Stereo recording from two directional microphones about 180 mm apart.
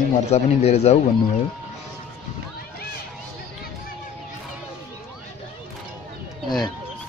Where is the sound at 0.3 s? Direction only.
35° left (ahead or behind).